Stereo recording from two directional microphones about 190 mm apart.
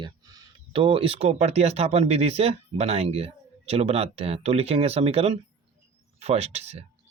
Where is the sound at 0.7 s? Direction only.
30° right (ahead or behind).